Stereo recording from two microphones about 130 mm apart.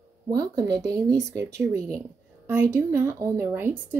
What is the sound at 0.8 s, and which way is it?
A woman's voice, 20° right (ahead or behind).